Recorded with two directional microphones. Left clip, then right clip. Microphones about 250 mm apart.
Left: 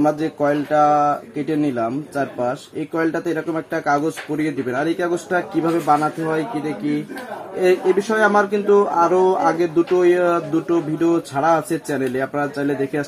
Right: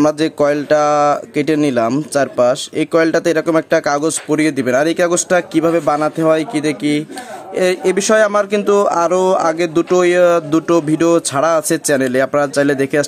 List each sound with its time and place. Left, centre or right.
0.0 s speech: right